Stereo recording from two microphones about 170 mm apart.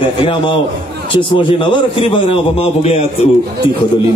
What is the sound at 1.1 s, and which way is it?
Music, 30° left (ahead or behind).